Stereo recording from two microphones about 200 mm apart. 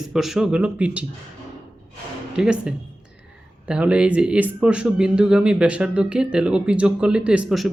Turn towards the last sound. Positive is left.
turn(degrees=0)  # may be behind; listen again after turning